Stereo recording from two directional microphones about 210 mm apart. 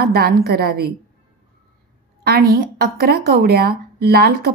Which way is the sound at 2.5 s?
45° right (ahead or behind).